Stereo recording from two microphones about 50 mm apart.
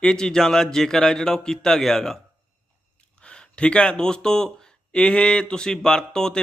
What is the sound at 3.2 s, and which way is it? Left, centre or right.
Speech, left.